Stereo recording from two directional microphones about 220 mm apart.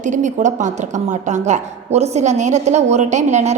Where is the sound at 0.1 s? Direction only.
35° right (ahead or behind).